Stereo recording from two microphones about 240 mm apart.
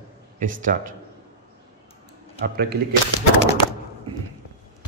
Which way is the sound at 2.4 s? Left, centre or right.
Right.